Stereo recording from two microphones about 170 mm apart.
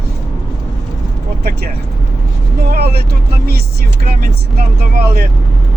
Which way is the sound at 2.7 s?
70° right (ahead or behind).